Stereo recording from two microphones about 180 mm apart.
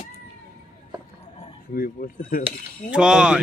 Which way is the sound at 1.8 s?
55° left (ahead or behind).